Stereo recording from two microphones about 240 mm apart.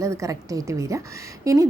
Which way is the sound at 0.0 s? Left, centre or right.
Centre.